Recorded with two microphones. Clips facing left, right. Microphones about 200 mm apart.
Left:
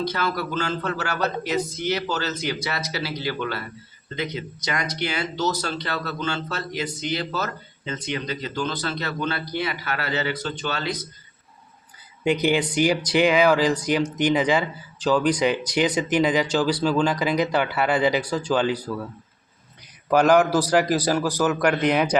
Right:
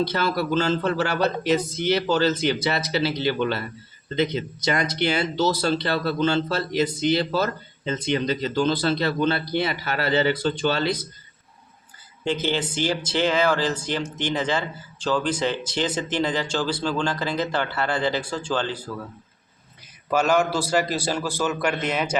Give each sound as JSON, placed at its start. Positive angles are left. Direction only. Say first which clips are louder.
{"t": 0.0, "sound": "speech", "louder": "right 2 dB", "side_deg": -30}
{"t": 12.2, "sound": "a man's voice", "louder": "left 4 dB", "side_deg": 15}
{"t": 20.1, "sound": "a man's voice", "louder": "left 4 dB", "side_deg": 15}